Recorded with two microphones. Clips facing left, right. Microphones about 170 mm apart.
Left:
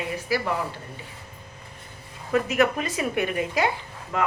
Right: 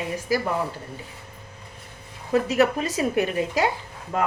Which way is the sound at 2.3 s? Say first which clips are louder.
Right 2 dB; 35° right (ahead or behind).